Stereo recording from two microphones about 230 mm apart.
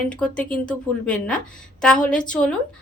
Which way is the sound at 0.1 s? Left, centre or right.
Centre.